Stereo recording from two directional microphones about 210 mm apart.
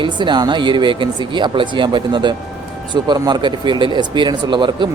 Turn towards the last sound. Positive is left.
turn(degrees=-20)  # may be behind; listen again after turning